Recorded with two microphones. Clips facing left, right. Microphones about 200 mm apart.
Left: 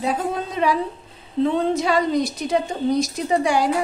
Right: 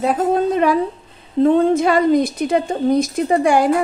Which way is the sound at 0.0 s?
50° right (ahead or behind).